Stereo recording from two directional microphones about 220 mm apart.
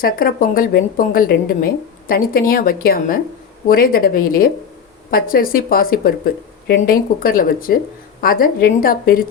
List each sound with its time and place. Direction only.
0.0 s speech: 40° left (ahead or behind)